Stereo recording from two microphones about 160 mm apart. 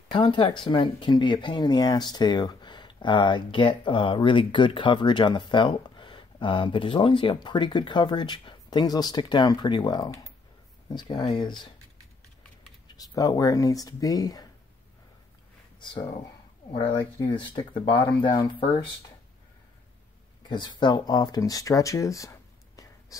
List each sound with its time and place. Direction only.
0.1 s speech: 30° left (ahead or behind)
12.8 s speech: 25° left (ahead or behind)
15.8 s speech: 30° left (ahead or behind)
20.4 s speech: 30° left (ahead or behind)